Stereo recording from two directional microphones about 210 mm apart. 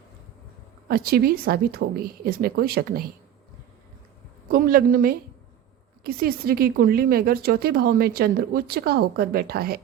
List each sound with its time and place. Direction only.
0.9 s a woman's voice: 45° right (ahead or behind)
4.5 s a woman's voice: 45° right (ahead or behind)